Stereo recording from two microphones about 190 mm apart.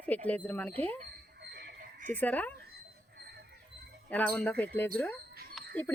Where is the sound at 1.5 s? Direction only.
55° right (ahead or behind).